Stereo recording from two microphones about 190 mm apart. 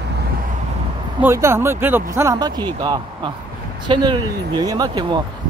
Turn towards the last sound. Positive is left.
turn(degrees=-20)  # may be behind; listen again after turning